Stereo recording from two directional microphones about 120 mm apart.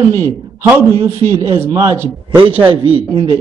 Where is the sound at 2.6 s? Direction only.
45° right (ahead or behind).